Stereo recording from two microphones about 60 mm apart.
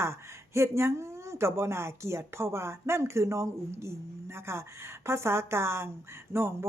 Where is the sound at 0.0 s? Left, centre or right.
Right.